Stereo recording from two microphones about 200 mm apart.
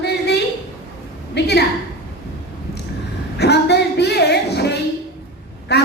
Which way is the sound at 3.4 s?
55° left (ahead or behind).